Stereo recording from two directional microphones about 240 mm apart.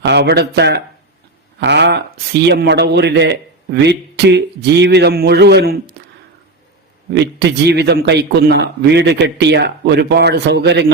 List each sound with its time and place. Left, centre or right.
0.0 s a man's voice: right
7.1 s a man's voice: right